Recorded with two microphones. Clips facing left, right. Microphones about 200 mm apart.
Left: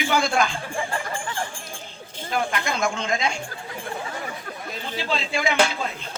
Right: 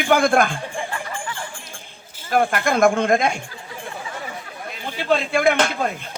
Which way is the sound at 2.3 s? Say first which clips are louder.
Right 7 dB; 55° right (ahead or behind).